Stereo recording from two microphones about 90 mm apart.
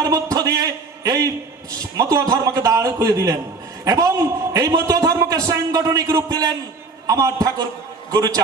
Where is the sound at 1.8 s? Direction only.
40° right (ahead or behind).